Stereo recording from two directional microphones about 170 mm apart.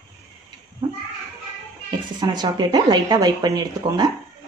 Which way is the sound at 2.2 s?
25° right (ahead or behind).